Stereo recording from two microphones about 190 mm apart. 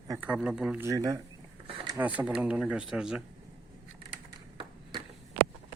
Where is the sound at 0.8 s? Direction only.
15° right (ahead or behind).